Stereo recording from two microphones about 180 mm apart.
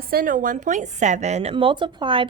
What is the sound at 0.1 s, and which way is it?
A woman's voice, 55° right (ahead or behind).